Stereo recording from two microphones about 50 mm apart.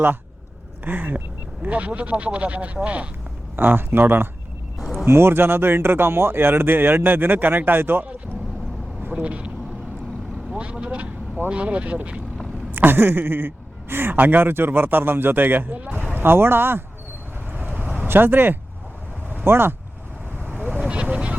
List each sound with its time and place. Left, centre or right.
0.9 s vehicle: right
1.6 s speech: right
3.5 s speech: right
9.0 s vehicle: right
10.5 s speech: right
12.7 s speech: right
16.1 s speech: right
17.7 s vehicle: right
18.1 s speech: right
20.5 s vehicle: right
20.8 s vehicle: right